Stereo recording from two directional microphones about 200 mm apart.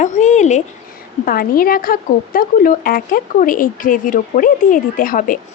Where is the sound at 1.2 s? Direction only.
45° left (ahead or behind).